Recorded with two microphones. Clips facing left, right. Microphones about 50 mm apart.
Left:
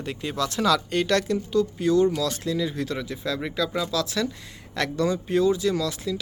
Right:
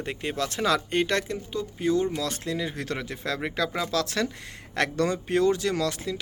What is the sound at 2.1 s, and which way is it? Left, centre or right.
Speech, right.